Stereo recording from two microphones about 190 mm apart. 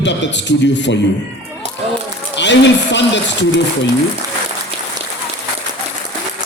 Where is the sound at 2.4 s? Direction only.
70° left (ahead or behind).